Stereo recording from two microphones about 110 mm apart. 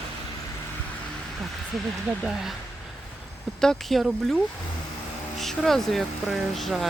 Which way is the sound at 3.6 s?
5° left (ahead or behind).